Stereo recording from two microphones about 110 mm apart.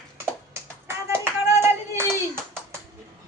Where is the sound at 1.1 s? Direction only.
25° right (ahead or behind).